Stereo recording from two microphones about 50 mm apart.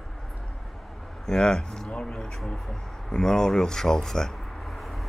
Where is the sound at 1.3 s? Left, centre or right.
Centre.